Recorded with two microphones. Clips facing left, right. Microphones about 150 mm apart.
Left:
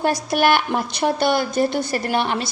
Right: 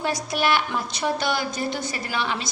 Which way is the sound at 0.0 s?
55° left (ahead or behind).